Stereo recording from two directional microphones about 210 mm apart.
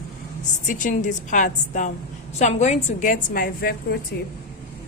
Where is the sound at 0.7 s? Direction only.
40° left (ahead or behind).